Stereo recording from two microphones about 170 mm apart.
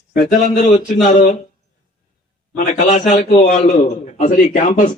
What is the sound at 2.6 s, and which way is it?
A man's voice, 45° left (ahead or behind).